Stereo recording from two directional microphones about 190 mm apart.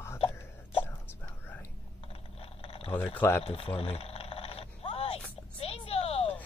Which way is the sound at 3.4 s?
30° left (ahead or behind).